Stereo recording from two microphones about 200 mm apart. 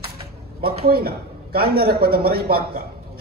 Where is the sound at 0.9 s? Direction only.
50° right (ahead or behind).